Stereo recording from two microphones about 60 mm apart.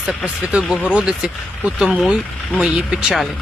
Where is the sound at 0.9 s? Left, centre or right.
Centre.